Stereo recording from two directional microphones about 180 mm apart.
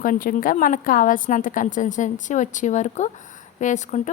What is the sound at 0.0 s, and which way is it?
A woman's voice, 50° left (ahead or behind).